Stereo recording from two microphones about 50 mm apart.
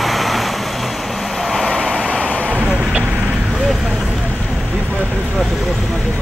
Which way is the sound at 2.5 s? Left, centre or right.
Right.